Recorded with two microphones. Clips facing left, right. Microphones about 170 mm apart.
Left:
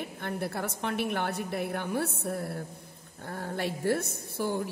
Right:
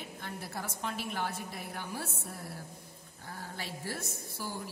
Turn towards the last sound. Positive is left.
turn(degrees=60)  # may be behind; listen again after turning